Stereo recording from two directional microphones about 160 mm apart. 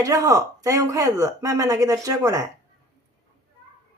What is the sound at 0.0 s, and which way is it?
Speech, 20° right (ahead or behind).